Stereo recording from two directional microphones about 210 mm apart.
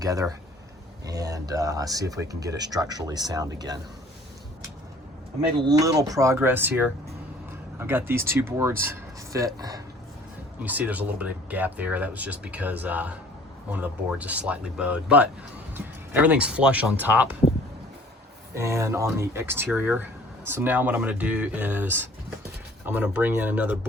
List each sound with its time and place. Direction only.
0.0 s speech: 15° right (ahead or behind)
5.5 s speech: 20° right (ahead or behind)
10.6 s speech: 5° right (ahead or behind)
18.5 s speech: 15° right (ahead or behind)